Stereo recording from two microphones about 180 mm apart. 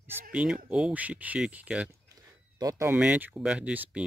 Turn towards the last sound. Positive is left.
turn(degrees=-5)  # may be behind; listen again after turning